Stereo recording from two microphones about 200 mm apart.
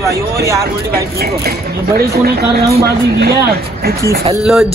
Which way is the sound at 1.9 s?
50° right (ahead or behind).